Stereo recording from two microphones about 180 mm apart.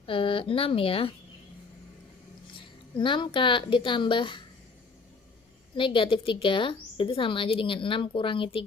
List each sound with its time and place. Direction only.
0.0 s a woman's voice: 30° left (ahead or behind)
2.6 s speech: 25° left (ahead or behind)
5.7 s a woman's voice: 30° left (ahead or behind)